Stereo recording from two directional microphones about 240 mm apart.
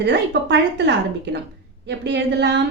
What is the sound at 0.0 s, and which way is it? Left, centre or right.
A woman's voice, right.